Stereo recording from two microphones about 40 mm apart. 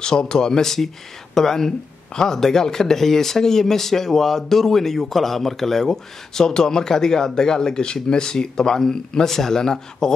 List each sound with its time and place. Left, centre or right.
0.0 s speech: centre